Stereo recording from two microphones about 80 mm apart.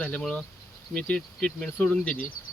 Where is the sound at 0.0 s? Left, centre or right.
Centre.